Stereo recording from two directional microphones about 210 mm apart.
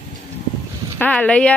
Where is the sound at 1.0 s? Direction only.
5° left (ahead or behind).